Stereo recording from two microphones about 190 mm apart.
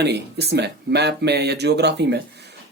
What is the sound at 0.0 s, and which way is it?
Speech, 60° right (ahead or behind).